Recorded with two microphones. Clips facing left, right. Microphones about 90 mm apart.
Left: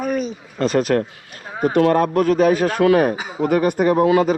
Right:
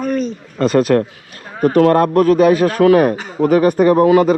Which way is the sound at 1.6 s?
50° right (ahead or behind).